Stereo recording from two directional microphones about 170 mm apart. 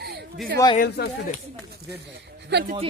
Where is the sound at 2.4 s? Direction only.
85° right.